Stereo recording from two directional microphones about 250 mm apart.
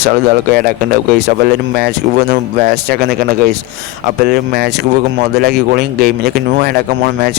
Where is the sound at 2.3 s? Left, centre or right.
Right.